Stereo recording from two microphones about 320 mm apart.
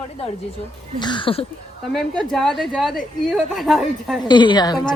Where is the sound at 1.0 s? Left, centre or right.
Centre.